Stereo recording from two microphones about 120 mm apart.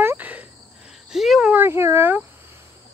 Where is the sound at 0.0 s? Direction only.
15° right (ahead or behind).